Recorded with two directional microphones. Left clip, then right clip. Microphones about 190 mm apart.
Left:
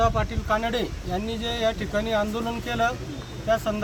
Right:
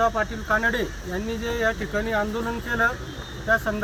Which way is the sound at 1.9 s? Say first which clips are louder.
Even; 15° left (ahead or behind).